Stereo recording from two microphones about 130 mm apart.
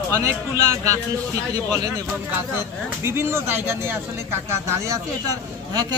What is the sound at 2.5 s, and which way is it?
Speech, 20° right (ahead or behind).